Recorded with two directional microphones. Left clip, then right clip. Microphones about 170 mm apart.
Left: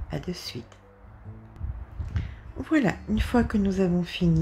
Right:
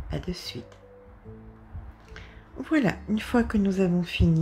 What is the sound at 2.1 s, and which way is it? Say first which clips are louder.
Speech: left 1 dB; centre (ahead or behind).